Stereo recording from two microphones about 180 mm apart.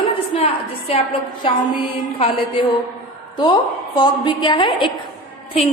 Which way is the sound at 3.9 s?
25° left (ahead or behind).